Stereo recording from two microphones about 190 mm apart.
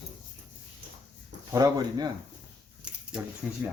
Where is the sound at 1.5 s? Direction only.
20° right (ahead or behind).